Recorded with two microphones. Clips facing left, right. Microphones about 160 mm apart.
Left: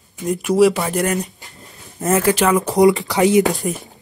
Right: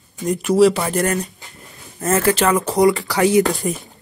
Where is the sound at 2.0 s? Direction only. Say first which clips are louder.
Left 1 dB; 15° left (ahead or behind).